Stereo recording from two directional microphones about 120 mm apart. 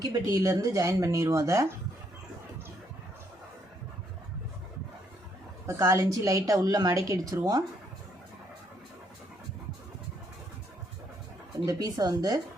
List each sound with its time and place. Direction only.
0.0 s a woman's voice: 30° right (ahead or behind)
5.6 s a woman's voice: 25° right (ahead or behind)
11.6 s speech: 30° right (ahead or behind)